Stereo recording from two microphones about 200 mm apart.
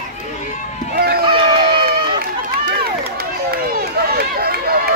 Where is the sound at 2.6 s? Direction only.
50° right (ahead or behind).